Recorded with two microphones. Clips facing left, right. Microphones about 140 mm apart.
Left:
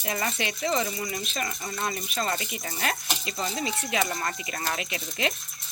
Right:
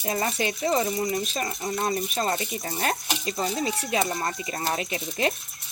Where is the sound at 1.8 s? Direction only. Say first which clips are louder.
Right 3 dB; 35° right (ahead or behind).